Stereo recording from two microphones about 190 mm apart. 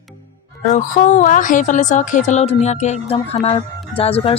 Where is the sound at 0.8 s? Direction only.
40° left (ahead or behind).